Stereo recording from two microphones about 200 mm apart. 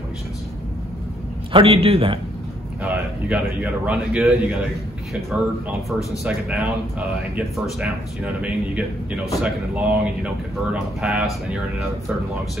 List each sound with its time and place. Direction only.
1.5 s a man's voice: 25° right (ahead or behind)
2.8 s speech: 5° right (ahead or behind)